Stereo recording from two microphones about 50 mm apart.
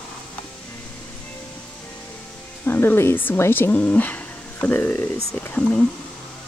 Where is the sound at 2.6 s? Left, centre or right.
Left.